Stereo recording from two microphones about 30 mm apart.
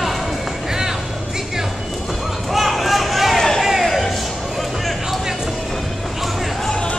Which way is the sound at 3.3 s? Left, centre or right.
Centre.